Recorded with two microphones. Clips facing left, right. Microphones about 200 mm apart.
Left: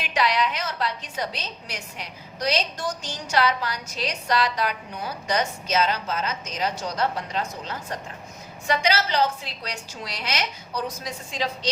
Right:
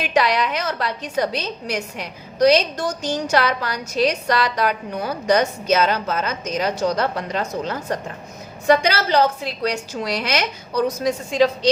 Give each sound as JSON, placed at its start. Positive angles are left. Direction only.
{"t": 0.0, "sound": "a woman's voice", "side_deg": -60}
{"t": 8.6, "sound": "a woman's voice", "side_deg": -55}